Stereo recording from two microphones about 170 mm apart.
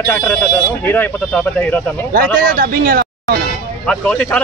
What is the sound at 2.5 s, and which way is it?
Speech, 60° right (ahead or behind).